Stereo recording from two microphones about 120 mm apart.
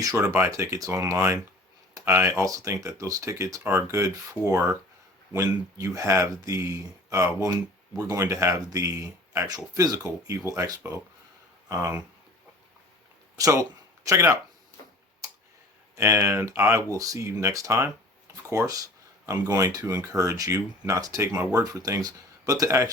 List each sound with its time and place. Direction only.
0.0 s speech: 25° right (ahead or behind)
5.8 s speech: 25° right (ahead or behind)
13.3 s speech: 25° right (ahead or behind)
15.2 s a sound: 30° right (ahead or behind)
16.0 s speech: 25° right (ahead or behind)